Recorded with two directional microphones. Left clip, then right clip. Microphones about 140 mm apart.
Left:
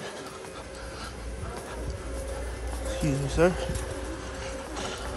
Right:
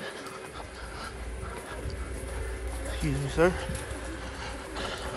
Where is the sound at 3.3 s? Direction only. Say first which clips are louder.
Left 1 dB; 20° left (ahead or behind).